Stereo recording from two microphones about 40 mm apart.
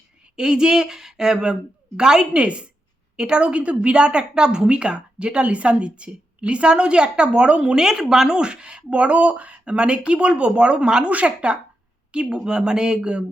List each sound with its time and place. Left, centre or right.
0.3 s a woman's voice: centre
2.4 s a woman's voice: right